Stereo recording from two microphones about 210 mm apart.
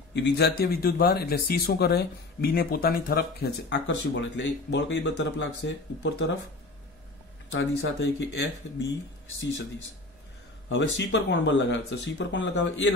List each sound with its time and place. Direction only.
0.1 s speech: 55° left (ahead or behind)
7.5 s speech: 60° left (ahead or behind)
10.7 s speech: 60° left (ahead or behind)